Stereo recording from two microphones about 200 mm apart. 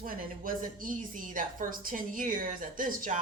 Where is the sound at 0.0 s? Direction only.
45° right (ahead or behind).